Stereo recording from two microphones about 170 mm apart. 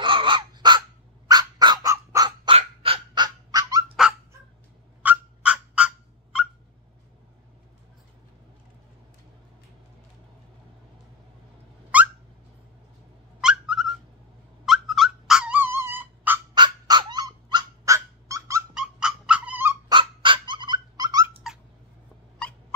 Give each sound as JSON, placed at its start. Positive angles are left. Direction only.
{"t": 0.0, "sound": "crow", "side_deg": -30}
{"t": 5.0, "sound": "a sound", "side_deg": -10}
{"t": 11.9, "sound": "a sound", "side_deg": -10}
{"t": 13.4, "sound": "a sound", "side_deg": -5}
{"t": 14.7, "sound": "dog", "side_deg": 0}
{"t": 16.5, "sound": "dog", "side_deg": -25}
{"t": 18.8, "sound": "dog", "side_deg": -5}
{"t": 19.9, "sound": "dog", "side_deg": -30}
{"t": 22.4, "sound": "turkey", "side_deg": 5}